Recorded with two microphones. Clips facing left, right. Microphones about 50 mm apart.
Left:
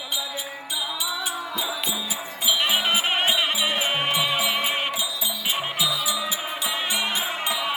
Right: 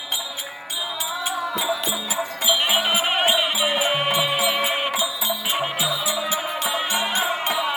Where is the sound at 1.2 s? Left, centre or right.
Right.